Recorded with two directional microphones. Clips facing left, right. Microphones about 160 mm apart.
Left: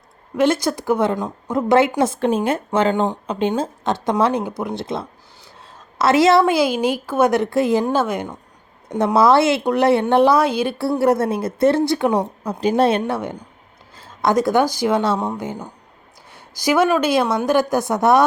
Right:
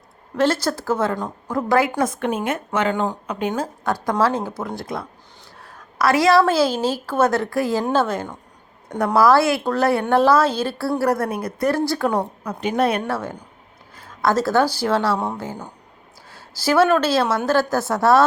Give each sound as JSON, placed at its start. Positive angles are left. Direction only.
{"t": 0.3, "sound": "a woman's voice", "side_deg": 15}
{"t": 5.6, "sound": "a sound", "side_deg": 25}
{"t": 6.4, "sound": "a woman's voice", "side_deg": 15}
{"t": 12.5, "sound": "speech", "side_deg": 30}
{"t": 13.1, "sound": "a woman's voice", "side_deg": 20}